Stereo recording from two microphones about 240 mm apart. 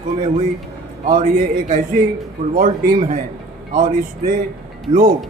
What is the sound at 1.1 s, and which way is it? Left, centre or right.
A man's voice, right.